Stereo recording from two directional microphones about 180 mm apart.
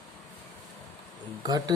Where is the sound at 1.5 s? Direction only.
20° right (ahead or behind).